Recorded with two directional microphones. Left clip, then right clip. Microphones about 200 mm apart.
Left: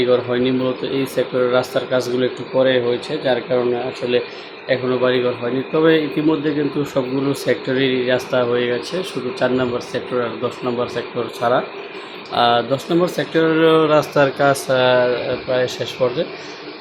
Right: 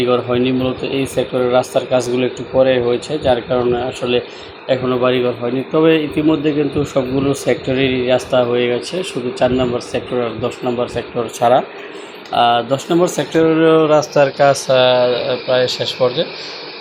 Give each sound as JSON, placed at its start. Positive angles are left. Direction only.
{"t": 0.0, "sound": "speech", "side_deg": -5}